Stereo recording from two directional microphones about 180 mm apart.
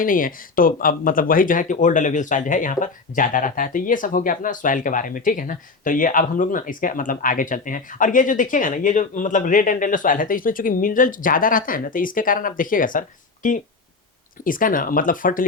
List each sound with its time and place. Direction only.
0.0 s speech: 50° left (ahead or behind)